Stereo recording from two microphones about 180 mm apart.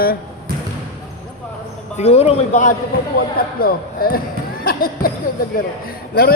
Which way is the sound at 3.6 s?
55° left (ahead or behind).